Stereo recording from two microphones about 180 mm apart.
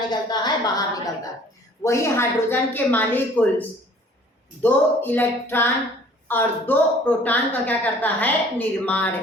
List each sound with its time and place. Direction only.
0.1 s a woman's voice: 25° left (ahead or behind); by 9.0 s 10° left (ahead or behind)